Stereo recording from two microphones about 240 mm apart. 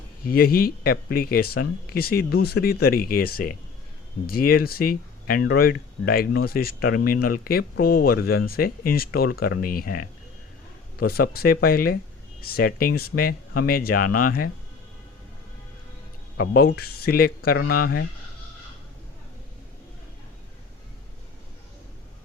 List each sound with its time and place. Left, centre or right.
0.3 s speech: left
16.4 s speech: left